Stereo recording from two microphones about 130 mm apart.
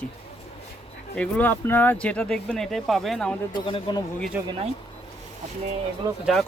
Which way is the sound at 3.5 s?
40° left (ahead or behind).